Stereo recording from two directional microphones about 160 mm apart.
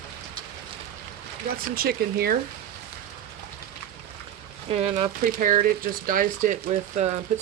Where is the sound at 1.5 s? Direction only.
75° right (ahead or behind).